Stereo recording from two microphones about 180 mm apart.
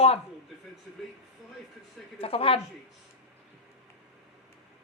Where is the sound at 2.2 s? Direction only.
30° left (ahead or behind).